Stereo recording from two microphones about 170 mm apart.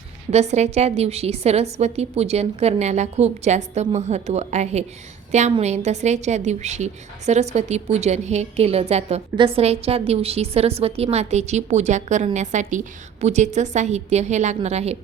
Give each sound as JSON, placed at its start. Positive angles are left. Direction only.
{"t": 0.3, "sound": "a woman's voice", "side_deg": -40}